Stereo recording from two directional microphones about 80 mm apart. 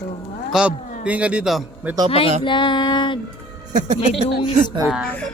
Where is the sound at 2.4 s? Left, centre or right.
Left.